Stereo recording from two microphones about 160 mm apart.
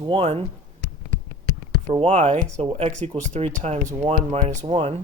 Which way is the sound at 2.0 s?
45° right (ahead or behind).